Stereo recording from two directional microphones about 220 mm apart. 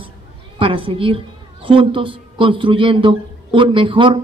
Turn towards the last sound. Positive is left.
turn(degrees=-25)  # may be behind; listen again after turning